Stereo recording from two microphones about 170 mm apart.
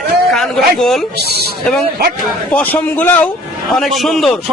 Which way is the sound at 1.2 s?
70° right (ahead or behind).